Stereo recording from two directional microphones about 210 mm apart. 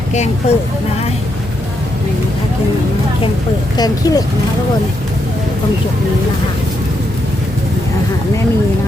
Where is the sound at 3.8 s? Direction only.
20° left (ahead or behind).